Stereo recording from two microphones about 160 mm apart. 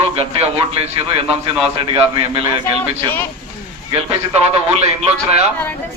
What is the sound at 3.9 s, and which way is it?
Speech, 40° right (ahead or behind).